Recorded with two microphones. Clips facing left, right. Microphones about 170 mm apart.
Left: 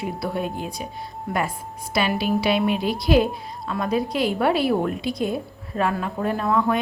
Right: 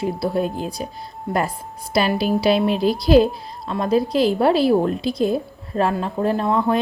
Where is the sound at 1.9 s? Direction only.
35° right (ahead or behind).